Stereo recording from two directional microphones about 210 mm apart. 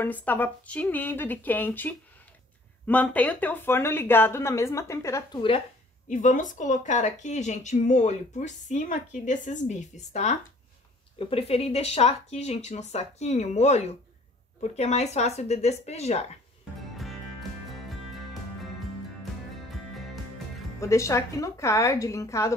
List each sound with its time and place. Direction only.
0.0 s speech: 10° left (ahead or behind)
6.0 s speech: 35° left (ahead or behind)
16.9 s music: centre (ahead or behind)
20.8 s speech: 15° left (ahead or behind)